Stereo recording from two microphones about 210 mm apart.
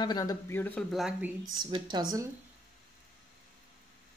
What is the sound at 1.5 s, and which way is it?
Speech, 20° right (ahead or behind).